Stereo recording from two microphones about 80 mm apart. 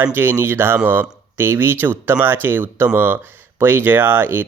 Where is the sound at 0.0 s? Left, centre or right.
Right.